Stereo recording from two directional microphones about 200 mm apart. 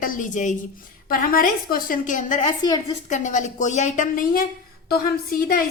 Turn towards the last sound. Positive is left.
turn(degrees=45)  # may be behind; listen again after turning